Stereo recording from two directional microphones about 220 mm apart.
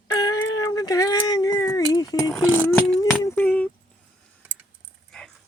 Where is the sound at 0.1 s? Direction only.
15° left (ahead or behind).